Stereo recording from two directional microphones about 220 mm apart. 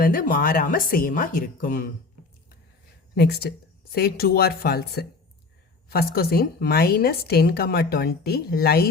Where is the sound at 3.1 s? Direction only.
45° left (ahead or behind).